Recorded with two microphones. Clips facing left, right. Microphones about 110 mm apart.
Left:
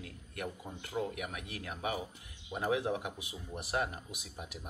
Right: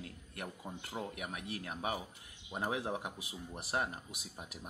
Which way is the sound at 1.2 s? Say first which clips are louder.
Left 1 dB; 30° right (ahead or behind).